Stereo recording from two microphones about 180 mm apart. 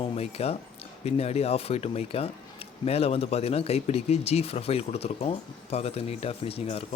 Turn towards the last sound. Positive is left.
turn(degrees=35)  # may be behind; listen again after turning